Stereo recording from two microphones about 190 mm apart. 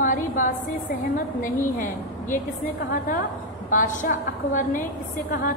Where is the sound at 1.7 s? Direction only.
45° left (ahead or behind).